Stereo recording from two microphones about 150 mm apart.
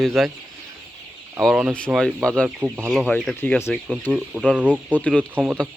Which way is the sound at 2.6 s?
15° right (ahead or behind).